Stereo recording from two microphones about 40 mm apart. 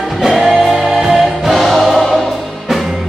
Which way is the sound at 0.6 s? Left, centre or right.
Centre.